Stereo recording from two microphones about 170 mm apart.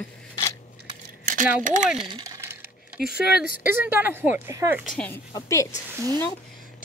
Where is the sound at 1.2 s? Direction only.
50° right (ahead or behind).